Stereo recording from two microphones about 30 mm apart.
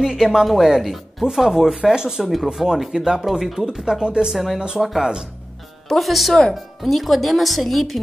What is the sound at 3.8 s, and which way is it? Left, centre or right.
Speech, right.